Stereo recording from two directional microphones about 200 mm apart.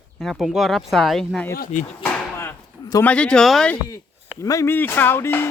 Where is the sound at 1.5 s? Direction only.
45° left (ahead or behind).